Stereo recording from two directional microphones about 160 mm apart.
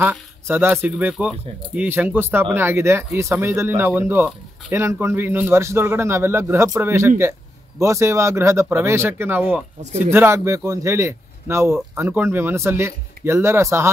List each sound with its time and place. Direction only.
0.0 s speech: 10° right (ahead or behind)